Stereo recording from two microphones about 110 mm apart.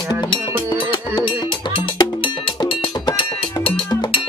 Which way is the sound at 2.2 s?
45° left (ahead or behind).